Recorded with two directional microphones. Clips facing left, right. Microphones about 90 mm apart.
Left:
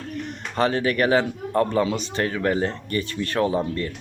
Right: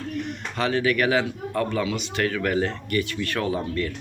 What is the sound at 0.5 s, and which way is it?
Speech, 35° left (ahead or behind).